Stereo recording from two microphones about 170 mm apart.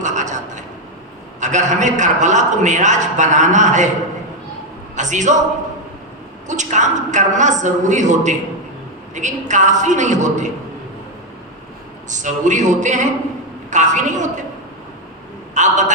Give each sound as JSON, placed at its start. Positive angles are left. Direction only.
{"t": 0.0, "sound": "a sound", "side_deg": -45}
{"t": 1.4, "sound": "a man's voice", "side_deg": -45}
{"t": 4.9, "sound": "a man's voice", "side_deg": -45}
{"t": 6.5, "sound": "a man's voice", "side_deg": -45}
{"t": 12.0, "sound": "a man's voice", "side_deg": -45}
{"t": 15.5, "sound": "a man's voice", "side_deg": -45}